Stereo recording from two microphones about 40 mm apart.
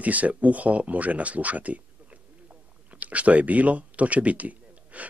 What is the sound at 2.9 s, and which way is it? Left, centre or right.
Speech, right.